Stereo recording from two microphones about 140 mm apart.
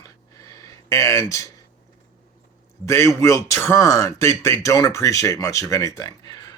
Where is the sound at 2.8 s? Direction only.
20° left (ahead or behind).